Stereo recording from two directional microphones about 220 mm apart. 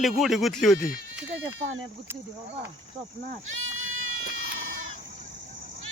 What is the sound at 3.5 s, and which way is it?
Goat, 65° right (ahead or behind).